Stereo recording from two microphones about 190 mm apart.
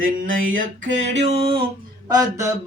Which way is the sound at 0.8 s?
75° right (ahead or behind).